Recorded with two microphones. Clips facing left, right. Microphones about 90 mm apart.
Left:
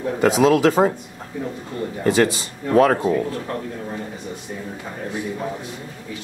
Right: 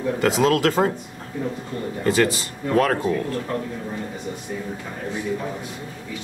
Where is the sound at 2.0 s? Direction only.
20° left (ahead or behind).